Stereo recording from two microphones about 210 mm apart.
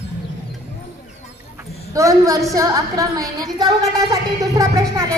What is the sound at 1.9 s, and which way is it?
A woman's voice, 15° right (ahead or behind).